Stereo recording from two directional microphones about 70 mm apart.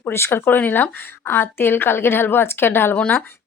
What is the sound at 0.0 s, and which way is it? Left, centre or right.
A woman's voice, left.